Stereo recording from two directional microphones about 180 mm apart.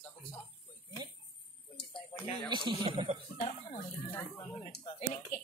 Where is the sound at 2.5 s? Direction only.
25° right (ahead or behind).